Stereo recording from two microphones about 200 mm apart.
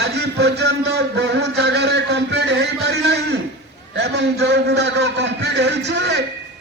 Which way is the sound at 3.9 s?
60° right (ahead or behind).